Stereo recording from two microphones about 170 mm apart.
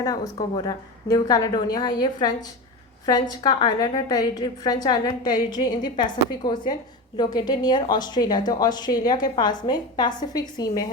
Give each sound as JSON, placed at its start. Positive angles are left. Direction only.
{"t": 0.0, "sound": "a woman's voice", "side_deg": 25}